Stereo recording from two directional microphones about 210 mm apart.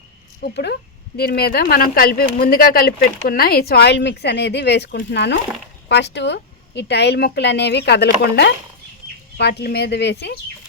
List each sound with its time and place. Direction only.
0.4 s a woman's voice: 50° left (ahead or behind)